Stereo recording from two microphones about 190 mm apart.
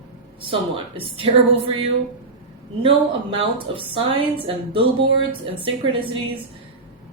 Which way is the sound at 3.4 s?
30° right (ahead or behind).